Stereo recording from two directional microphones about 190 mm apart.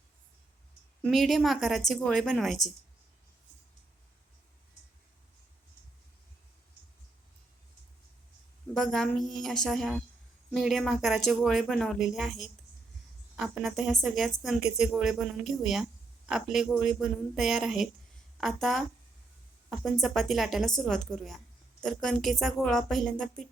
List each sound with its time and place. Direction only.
1.0 s a woman's voice: centre (ahead or behind)
8.7 s a woman's voice: centre (ahead or behind)